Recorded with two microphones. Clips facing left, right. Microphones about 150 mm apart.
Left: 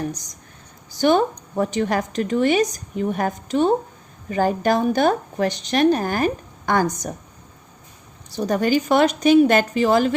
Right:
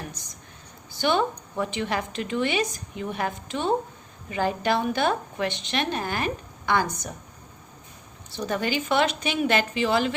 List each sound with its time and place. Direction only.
0.9 s a woman's voice: 40° left (ahead or behind)
8.3 s a woman's voice: 40° left (ahead or behind)